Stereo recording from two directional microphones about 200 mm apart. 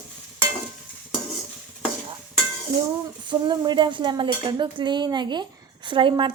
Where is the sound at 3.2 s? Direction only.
20° right (ahead or behind).